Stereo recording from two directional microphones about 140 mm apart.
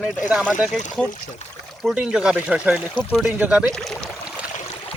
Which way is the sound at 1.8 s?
5° right (ahead or behind).